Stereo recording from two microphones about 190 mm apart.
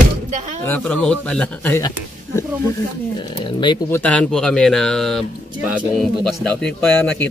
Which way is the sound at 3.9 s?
5° left (ahead or behind).